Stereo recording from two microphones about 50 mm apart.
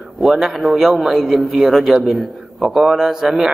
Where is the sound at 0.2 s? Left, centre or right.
Centre.